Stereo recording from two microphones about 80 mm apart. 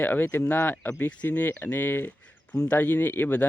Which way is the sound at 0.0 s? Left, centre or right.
Left.